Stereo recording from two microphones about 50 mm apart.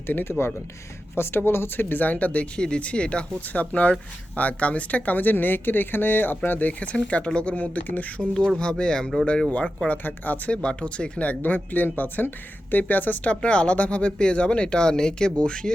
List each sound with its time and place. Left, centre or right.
0.3 s speech: left
8.2 s speech: centre
9.9 s speech: left
10.5 s speech: left
13.2 s speech: left